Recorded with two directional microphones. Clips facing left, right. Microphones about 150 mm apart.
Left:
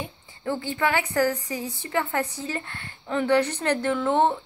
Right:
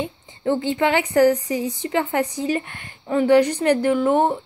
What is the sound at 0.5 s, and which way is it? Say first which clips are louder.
A woman's voice: right 6 dB; 20° right (ahead or behind).